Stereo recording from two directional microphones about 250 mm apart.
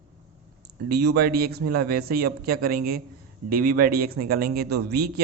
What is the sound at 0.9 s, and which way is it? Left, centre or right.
Speech, right.